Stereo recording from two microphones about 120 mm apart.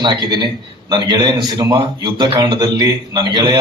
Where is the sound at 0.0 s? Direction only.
35° right (ahead or behind).